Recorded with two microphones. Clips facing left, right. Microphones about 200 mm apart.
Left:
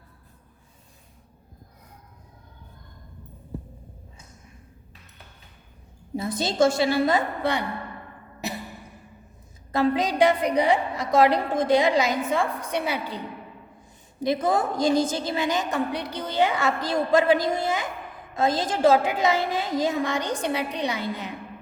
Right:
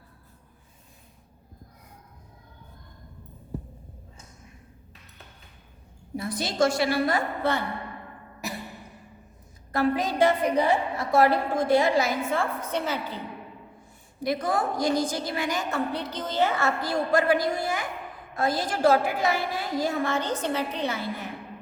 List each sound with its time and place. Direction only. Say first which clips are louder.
6.1 s a woman's voice: left 3 dB; 25° left (ahead or behind)
9.7 s a woman's voice: left 2 dB; 20° left (ahead or behind)